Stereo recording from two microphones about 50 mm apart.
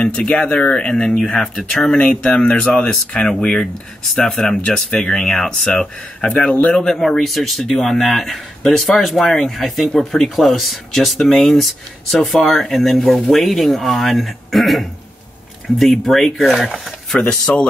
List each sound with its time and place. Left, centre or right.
0.0 s speech: centre
1.8 s speech: left
5.8 s speech: left
6.7 s speech: centre
7.0 s speech: centre
17.3 s speech: centre